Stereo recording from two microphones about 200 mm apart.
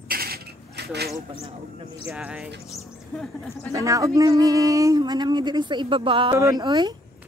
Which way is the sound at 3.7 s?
15° right (ahead or behind).